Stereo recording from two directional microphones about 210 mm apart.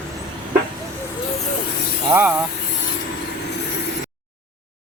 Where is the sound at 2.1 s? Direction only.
10° right (ahead or behind).